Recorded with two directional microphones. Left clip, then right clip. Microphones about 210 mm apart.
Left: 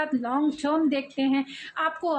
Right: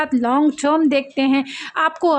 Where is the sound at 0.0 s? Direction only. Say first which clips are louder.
Right 9 dB; 50° right (ahead or behind).